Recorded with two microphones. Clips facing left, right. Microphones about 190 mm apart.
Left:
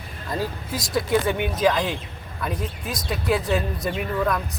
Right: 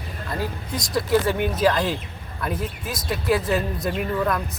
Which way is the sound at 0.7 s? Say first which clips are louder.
Right 1 dB; centre (ahead or behind).